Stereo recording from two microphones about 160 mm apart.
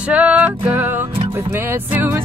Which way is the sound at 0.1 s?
10° right (ahead or behind).